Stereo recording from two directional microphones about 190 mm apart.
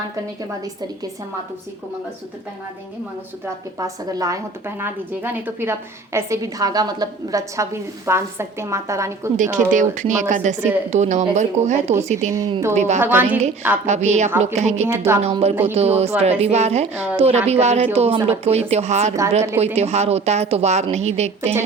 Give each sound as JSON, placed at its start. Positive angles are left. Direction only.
{"t": 3.8, "sound": "a woman's voice", "side_deg": -20}
{"t": 9.4, "sound": "a woman's voice", "side_deg": -45}
{"t": 12.3, "sound": "a woman's voice", "side_deg": -15}
{"t": 12.7, "sound": "a woman's voice", "side_deg": -35}
{"t": 13.0, "sound": "a woman's voice", "side_deg": -10}
{"t": 13.8, "sound": "a woman's voice", "side_deg": -35}
{"t": 14.8, "sound": "a woman's voice", "side_deg": -15}
{"t": 15.2, "sound": "a woman's voice", "side_deg": -35}